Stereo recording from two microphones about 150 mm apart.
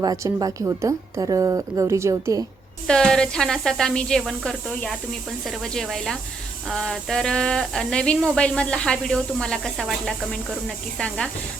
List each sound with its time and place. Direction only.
0.0 s a woman's voice: 25° right (ahead or behind)
2.8 s speech: 5° left (ahead or behind)